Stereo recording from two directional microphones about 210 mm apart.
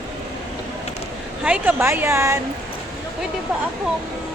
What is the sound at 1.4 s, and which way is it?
Speech, 5° right (ahead or behind).